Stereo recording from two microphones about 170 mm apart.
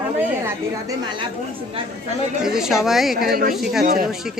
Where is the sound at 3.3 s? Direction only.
60° right (ahead or behind).